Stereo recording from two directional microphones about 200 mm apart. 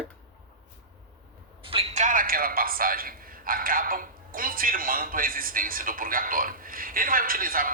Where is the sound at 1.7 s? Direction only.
30° right (ahead or behind); by 7.7 s 45° right (ahead or behind).